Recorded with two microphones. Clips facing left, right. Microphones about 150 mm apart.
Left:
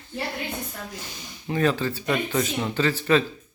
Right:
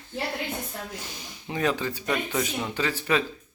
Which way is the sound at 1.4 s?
15° right (ahead or behind).